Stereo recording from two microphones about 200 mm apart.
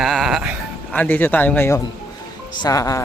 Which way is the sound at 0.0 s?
Centre (ahead or behind).